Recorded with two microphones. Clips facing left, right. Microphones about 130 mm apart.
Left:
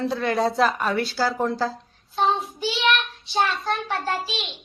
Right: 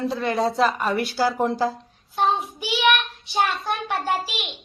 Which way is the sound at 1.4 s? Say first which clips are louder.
Right 2 dB; 20° right (ahead or behind).